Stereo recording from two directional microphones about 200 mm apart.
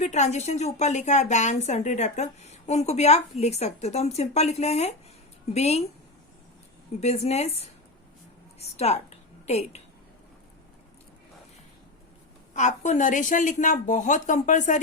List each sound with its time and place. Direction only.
0.0 s a woman's voice: 35° left (ahead or behind)
7.0 s a woman's voice: 35° left (ahead or behind)
12.5 s a woman's voice: 35° left (ahead or behind)